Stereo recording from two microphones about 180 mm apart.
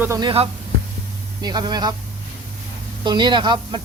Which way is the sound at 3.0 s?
25° right (ahead or behind).